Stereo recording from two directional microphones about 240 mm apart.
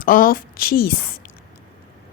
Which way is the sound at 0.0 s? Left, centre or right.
Left.